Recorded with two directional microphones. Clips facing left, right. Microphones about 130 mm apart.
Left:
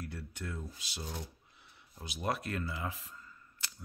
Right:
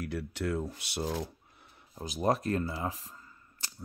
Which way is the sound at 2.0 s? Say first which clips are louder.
Right 7 dB; 40° right (ahead or behind).